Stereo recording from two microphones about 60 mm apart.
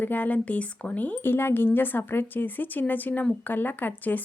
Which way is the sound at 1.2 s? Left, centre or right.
Left.